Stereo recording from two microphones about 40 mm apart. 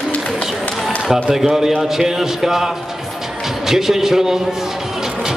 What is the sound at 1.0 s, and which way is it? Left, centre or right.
Speech, centre.